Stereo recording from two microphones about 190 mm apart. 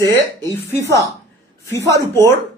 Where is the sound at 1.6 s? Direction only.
15° left (ahead or behind).